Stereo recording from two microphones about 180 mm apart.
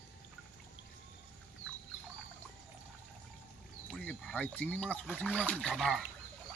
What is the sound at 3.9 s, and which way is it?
Speech, 5° left (ahead or behind).